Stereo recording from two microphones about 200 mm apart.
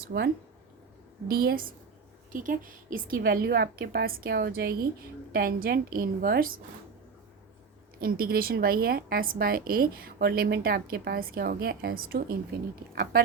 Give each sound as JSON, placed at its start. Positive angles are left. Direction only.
{"t": 0.0, "sound": "speech", "side_deg": -55}
{"t": 1.3, "sound": "a woman's voice", "side_deg": -50}
{"t": 8.0, "sound": "a woman's voice", "side_deg": -50}